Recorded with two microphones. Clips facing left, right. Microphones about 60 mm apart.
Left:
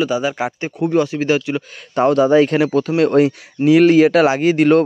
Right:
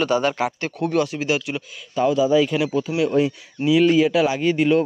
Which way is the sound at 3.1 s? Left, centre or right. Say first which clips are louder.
Left 6 dB; left.